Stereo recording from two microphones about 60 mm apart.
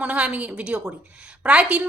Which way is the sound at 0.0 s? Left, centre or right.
Right.